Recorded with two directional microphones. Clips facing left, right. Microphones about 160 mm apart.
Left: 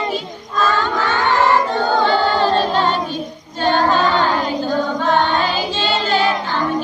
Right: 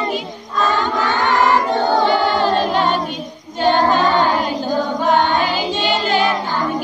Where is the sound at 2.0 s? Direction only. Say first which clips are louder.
Even; 15° right (ahead or behind).